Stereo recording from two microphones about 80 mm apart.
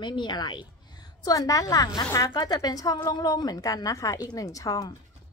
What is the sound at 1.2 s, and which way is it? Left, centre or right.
A woman's voice, left.